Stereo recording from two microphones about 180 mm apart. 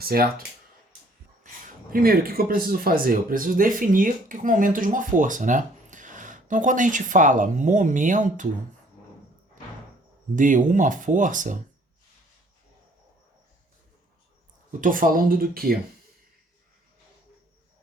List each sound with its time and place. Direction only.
0.0 s speech: 55° right (ahead or behind)
1.6 s speech: 55° right (ahead or behind)
10.3 s speech: 45° right (ahead or behind)
14.7 s speech: 50° right (ahead or behind)